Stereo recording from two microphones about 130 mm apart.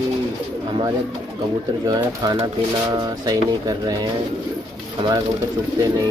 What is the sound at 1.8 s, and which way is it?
Speech, 30° right (ahead or behind).